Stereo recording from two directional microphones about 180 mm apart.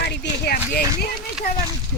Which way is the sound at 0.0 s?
60° left (ahead or behind).